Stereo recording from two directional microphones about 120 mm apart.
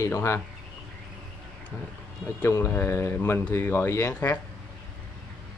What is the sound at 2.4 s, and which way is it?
Speech, 20° left (ahead or behind).